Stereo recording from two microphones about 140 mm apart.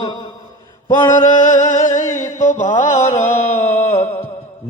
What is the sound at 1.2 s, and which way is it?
Music, 65° left (ahead or behind).